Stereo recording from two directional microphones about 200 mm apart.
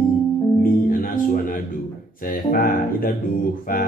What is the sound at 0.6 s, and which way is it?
Music, 45° left (ahead or behind).